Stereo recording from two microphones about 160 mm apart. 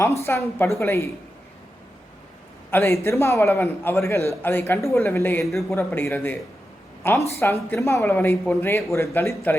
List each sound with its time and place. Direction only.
0.0 s speech: 20° left (ahead or behind)
2.6 s speech: 15° left (ahead or behind)
5.5 s a man's voice: centre (ahead or behind)
5.7 s speech: 15° left (ahead or behind)